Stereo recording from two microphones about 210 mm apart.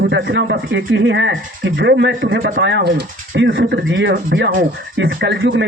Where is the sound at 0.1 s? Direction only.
60° right (ahead or behind).